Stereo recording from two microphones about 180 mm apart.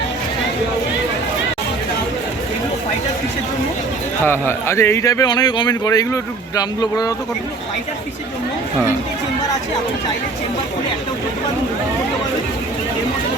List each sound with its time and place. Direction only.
4.2 s speech: 15° left (ahead or behind)